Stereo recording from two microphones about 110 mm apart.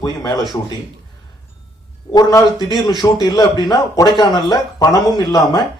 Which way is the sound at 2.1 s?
35° left (ahead or behind).